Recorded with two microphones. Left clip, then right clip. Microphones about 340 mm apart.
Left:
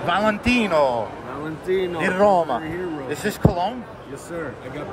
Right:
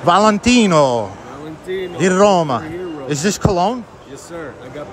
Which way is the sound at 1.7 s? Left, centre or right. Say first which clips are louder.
Left 2 dB; centre.